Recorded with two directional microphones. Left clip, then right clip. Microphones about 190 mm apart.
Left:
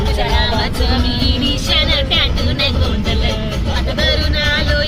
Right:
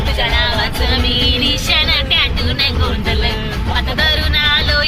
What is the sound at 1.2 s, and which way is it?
Music, 10° left (ahead or behind).